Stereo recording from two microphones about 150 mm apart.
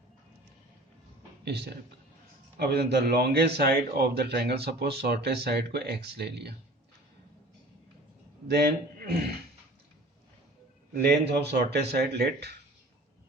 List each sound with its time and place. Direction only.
1.5 s a man's voice: 90° right
8.4 s a man's voice: 90° right
11.0 s a man's voice: 90° right